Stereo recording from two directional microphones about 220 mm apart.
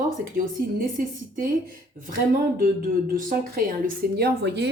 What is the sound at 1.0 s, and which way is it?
Speech, 40° right (ahead or behind).